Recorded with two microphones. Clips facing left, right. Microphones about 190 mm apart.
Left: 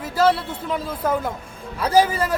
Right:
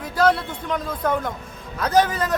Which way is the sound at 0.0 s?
5° left (ahead or behind).